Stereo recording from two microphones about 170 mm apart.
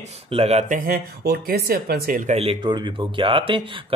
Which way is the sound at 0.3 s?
40° right (ahead or behind).